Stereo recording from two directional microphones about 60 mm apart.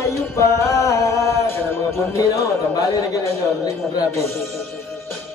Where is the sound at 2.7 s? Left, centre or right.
Left.